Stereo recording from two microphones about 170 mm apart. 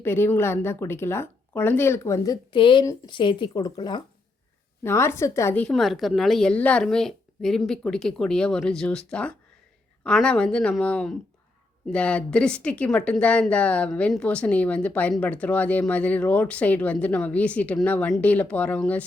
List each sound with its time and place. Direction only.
0.0 s speech: 15° left (ahead or behind)
4.8 s a woman's voice: 15° left (ahead or behind)